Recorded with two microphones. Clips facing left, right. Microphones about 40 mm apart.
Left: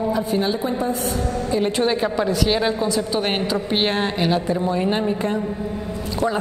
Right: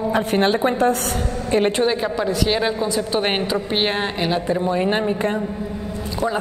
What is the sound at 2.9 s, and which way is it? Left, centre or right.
Speech, centre.